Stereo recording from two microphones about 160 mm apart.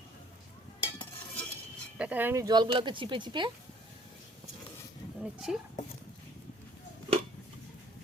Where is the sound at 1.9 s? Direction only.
10° right (ahead or behind); by 3.5 s 30° right (ahead or behind).